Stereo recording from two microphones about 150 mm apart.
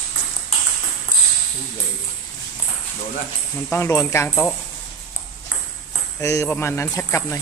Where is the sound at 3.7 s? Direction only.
20° left (ahead or behind).